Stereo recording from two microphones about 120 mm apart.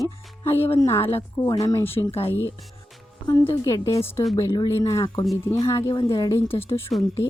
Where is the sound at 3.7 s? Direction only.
25° left (ahead or behind).